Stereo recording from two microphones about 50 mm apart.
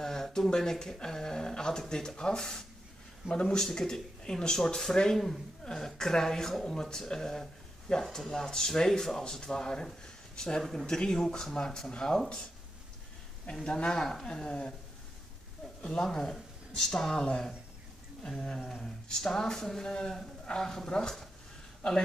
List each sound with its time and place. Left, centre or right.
0.0 s speech: centre
13.7 s speech: centre
15.8 s speech: centre
16.1 s speech: centre